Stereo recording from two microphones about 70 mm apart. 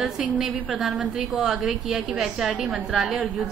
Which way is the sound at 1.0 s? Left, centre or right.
Centre.